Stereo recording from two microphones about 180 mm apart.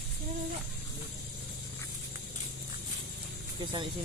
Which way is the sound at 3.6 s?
25° right (ahead or behind).